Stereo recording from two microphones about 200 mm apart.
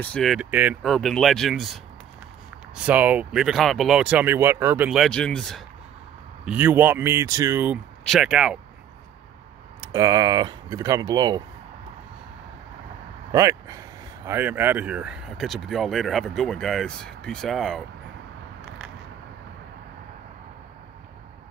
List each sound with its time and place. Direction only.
0.0 s speech: 5° left (ahead or behind)
6.4 s speech: 10° right (ahead or behind)
9.9 s speech: 20° right (ahead or behind)
13.3 s speech: 15° right (ahead or behind); by 17.8 s centre (ahead or behind)